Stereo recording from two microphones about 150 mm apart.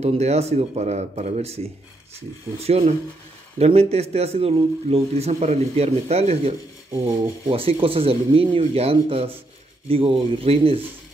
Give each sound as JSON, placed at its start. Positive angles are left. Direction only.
{"t": 0.0, "sound": "a man's voice", "side_deg": -45}
{"t": 6.9, "sound": "rub", "side_deg": -15}
{"t": 7.5, "sound": "speech", "side_deg": -40}